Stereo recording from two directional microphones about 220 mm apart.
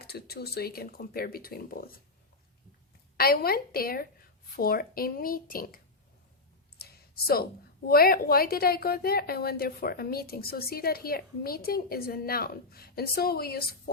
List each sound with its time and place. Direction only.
0.0 s a woman's voice: 45° left (ahead or behind)
3.2 s a woman's voice: 45° left (ahead or behind)
6.7 s clicking: 45° left (ahead or behind)
7.9 s a woman's voice: 45° left (ahead or behind)